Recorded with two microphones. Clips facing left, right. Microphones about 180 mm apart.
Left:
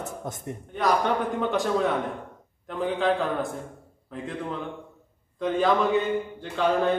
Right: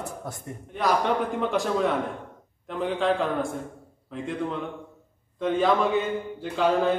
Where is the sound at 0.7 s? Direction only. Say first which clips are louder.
Even; centre (ahead or behind).